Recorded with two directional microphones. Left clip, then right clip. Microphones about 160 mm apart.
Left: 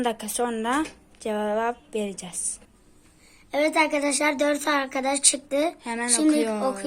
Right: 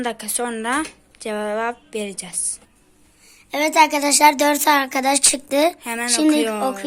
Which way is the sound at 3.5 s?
25° right (ahead or behind).